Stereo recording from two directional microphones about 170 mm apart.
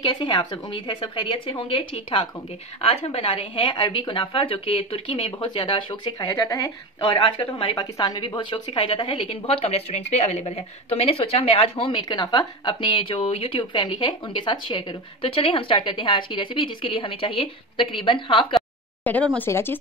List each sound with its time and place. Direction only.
0.0 s a woman's voice: 25° left (ahead or behind)
19.3 s speech: 15° left (ahead or behind)